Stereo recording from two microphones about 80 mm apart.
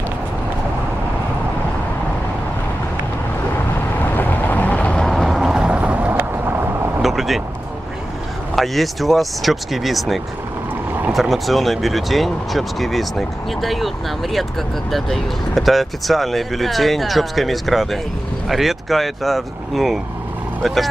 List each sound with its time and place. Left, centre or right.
4.2 s vehicle: left
5.0 s vehicle: centre; by 6.5 s right
7.0 s vehicle: centre
8.5 s speech: centre